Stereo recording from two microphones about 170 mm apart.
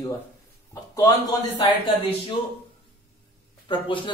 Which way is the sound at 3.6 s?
30° left (ahead or behind).